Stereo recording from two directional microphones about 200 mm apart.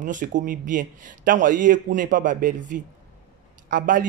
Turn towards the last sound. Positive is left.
turn(degrees=-45)  # may be behind; listen again after turning